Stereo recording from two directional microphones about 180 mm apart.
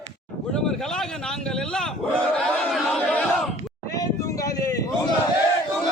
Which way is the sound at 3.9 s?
20° left (ahead or behind).